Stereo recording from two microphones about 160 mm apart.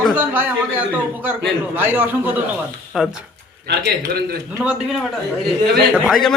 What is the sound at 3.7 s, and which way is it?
Speech, 90° right.